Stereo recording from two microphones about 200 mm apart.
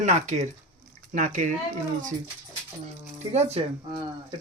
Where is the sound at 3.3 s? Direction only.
30° right (ahead or behind).